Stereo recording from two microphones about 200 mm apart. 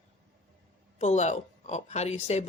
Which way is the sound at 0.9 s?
35° left (ahead or behind).